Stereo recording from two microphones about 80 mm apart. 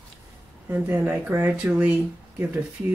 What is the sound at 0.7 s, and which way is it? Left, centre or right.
Speech, right.